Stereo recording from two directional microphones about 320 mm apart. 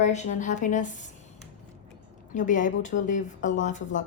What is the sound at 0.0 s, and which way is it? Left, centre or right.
A woman's voice, left.